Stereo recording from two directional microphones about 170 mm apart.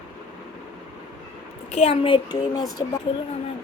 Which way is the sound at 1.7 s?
35° left (ahead or behind).